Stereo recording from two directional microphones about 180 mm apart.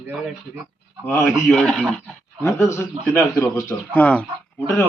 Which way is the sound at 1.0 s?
10° left (ahead or behind).